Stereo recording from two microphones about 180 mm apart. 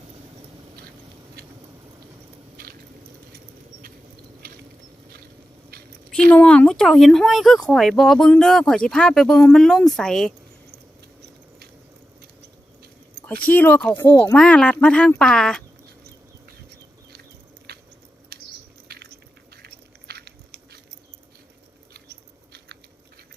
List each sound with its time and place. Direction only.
3.3 s rodents: 55° right (ahead or behind)
4.4 s a sound: 55° right (ahead or behind)
5.7 s a sound: 55° right (ahead or behind)
6.3 s speech: 10° left (ahead or behind)
13.2 s speech: 10° left (ahead or behind)
17.7 s biting: 60° right (ahead or behind)
18.3 s a sound: 60° right (ahead or behind)
19.6 s biting: 65° right (ahead or behind)
21.9 s patter: 65° right (ahead or behind)